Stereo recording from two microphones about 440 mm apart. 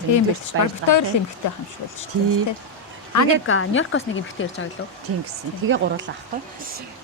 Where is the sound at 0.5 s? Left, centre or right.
Right.